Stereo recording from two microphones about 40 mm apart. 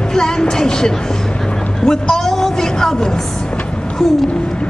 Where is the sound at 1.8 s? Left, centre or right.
Centre.